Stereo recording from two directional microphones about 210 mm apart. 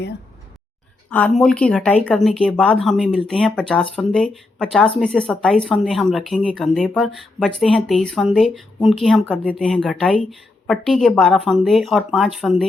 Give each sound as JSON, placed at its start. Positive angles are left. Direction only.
{"t": 1.1, "sound": "speech", "side_deg": 5}